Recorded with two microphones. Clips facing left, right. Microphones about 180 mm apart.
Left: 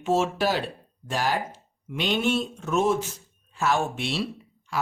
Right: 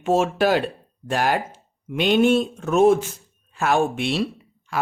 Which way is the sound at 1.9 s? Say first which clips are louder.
Right 8 dB; 55° right (ahead or behind).